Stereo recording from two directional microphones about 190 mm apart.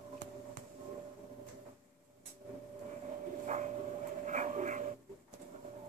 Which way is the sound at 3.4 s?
40° right (ahead or behind).